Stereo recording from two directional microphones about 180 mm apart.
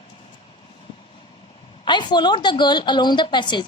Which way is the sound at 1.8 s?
25° left (ahead or behind).